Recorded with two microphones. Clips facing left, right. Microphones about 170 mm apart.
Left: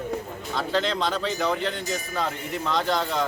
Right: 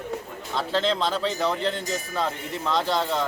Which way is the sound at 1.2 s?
30° right (ahead or behind).